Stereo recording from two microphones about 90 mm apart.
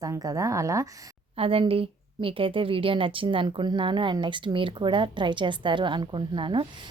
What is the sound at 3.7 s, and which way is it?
A woman's voice, 60° right (ahead or behind).